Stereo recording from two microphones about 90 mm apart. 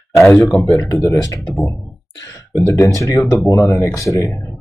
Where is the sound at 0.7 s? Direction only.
40° left (ahead or behind).